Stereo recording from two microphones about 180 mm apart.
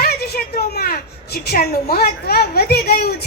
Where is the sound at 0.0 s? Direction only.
60° left (ahead or behind).